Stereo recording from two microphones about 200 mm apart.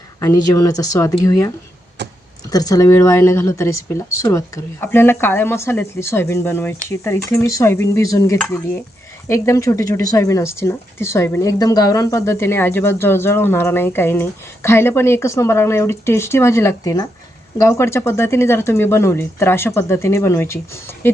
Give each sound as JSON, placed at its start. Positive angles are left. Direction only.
{"t": 0.2, "sound": "speech", "side_deg": 15}
{"t": 2.0, "sound": "a sound", "side_deg": -60}
{"t": 2.5, "sound": "speech", "side_deg": 20}